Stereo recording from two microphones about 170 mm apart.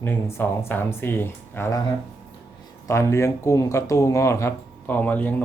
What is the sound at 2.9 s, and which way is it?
Speech, 15° left (ahead or behind).